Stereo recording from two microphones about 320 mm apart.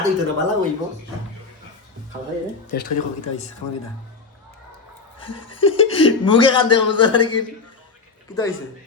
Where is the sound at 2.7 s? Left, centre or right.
Left.